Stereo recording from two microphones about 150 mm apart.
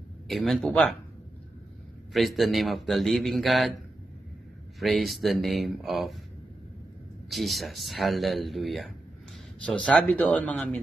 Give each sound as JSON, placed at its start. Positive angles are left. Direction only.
{"t": 0.3, "sound": "speech", "side_deg": 0}
{"t": 2.1, "sound": "speech", "side_deg": 0}
{"t": 4.7, "sound": "speech", "side_deg": 0}
{"t": 7.2, "sound": "speech", "side_deg": 0}